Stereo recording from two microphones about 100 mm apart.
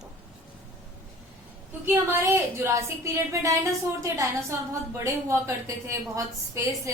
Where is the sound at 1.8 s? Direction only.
30° right (ahead or behind).